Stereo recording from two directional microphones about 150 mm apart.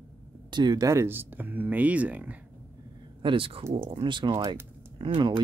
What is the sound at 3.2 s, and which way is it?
Speech, 35° right (ahead or behind).